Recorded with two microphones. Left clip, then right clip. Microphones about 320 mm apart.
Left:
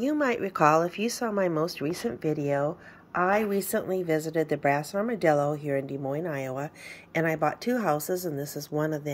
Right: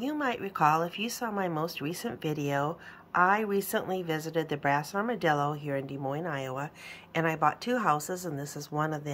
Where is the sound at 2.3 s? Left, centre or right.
Centre.